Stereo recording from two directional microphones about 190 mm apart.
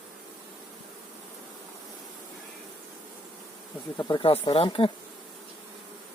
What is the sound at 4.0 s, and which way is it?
Speech, 25° left (ahead or behind).